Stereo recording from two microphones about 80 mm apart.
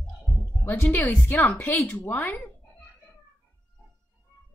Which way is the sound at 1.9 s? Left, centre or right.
Left.